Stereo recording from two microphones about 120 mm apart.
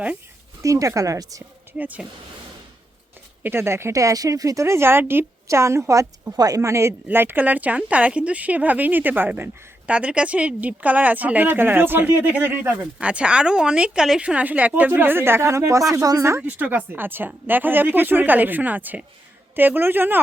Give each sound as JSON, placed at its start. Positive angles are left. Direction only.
{"t": 0.6, "sound": "speech", "side_deg": -25}
{"t": 1.8, "sound": "speech", "side_deg": -15}
{"t": 3.4, "sound": "speech", "side_deg": -20}
{"t": 16.4, "sound": "speech", "side_deg": -10}